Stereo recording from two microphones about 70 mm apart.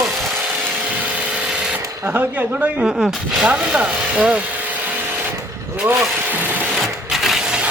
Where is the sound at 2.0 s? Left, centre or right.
Right.